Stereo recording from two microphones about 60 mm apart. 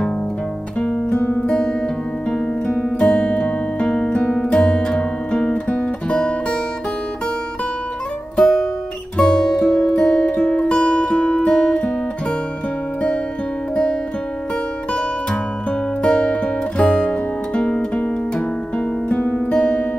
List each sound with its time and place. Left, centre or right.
1.1 s music: left
1.5 s music: centre
2.8 s music: centre
8.4 s music: centre
16.0 s music: centre
19.0 s music: centre